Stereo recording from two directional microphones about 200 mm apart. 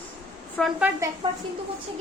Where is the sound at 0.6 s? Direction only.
5° right (ahead or behind).